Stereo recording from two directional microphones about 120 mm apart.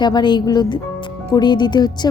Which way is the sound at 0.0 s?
40° left (ahead or behind).